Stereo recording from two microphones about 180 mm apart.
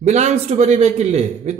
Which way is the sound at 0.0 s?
40° right (ahead or behind).